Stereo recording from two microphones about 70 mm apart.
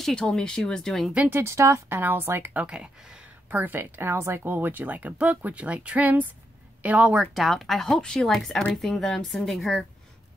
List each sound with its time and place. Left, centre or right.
0.0 s speech: centre
1.3 s speech: right
1.9 s speech: right
2.5 s speech: centre
3.4 s a woman's voice: right
7.2 s speech: centre